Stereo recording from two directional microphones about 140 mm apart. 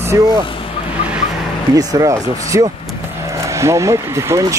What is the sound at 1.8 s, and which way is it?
Speech, 25° right (ahead or behind).